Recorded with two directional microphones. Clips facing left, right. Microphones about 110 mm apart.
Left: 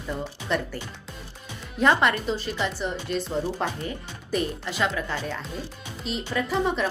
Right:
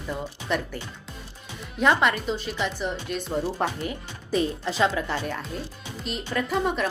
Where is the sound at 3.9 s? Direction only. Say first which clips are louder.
Right 2 dB; 20° right (ahead or behind).